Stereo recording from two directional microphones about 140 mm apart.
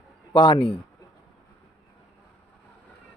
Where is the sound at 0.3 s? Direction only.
35° left (ahead or behind).